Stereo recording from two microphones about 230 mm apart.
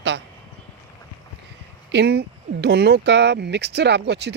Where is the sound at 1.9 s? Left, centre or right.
Right.